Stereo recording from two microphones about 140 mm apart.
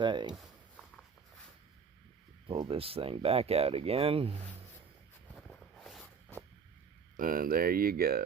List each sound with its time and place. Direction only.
0.0 s speech: 35° right (ahead or behind)
2.6 s speech: 40° right (ahead or behind)
5.3 s a sound: 5° left (ahead or behind)
7.2 s speech: 90° right